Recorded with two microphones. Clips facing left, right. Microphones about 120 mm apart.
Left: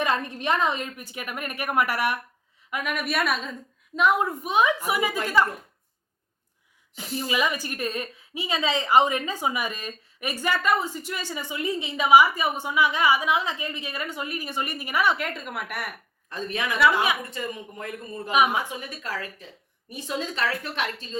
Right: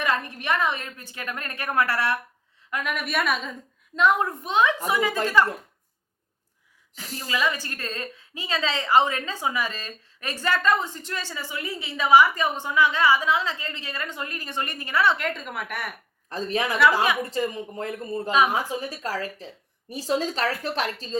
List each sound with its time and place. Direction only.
0.0 s a woman's voice: 20° left (ahead or behind)
7.2 s a woman's voice: 15° left (ahead or behind)
16.3 s a woman's voice: 35° right (ahead or behind)